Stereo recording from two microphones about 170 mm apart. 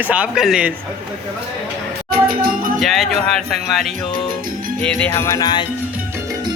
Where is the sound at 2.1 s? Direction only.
60° right (ahead or behind).